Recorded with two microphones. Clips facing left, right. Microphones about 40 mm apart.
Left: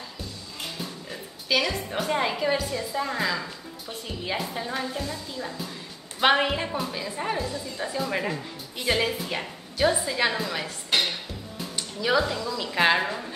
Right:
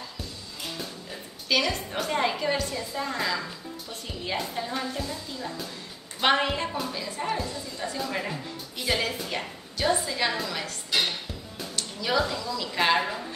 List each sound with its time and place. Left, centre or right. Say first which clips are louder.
1.5 s a woman's voice: left 1 dB; centre
10.9 s music: left 2 dB; left
11.7 s a woman's voice: left 3 dB; centre